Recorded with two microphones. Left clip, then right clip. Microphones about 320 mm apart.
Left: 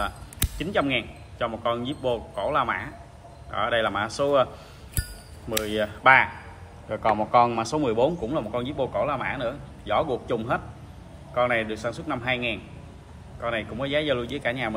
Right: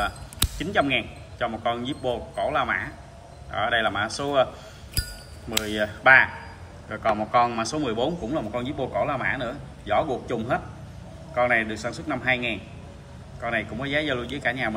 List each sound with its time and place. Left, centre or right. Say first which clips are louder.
0.6 s a man's voice: right 1 dB; centre
5.6 s a man's voice: even; centre
6.9 s a man's voice: left 1 dB; left
7.3 s a man's voice: left 2 dB; centre